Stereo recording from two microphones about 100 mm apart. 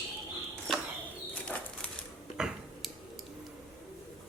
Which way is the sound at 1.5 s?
10° left (ahead or behind).